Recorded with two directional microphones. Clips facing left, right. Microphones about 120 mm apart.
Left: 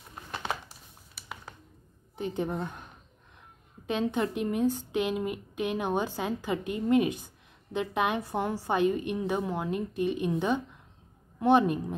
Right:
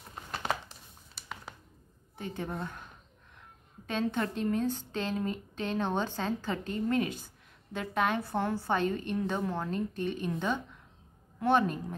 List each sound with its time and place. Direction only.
2.1 s a woman's voice: 20° left (ahead or behind)